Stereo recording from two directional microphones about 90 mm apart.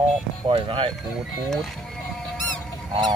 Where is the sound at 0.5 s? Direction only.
75° right (ahead or behind).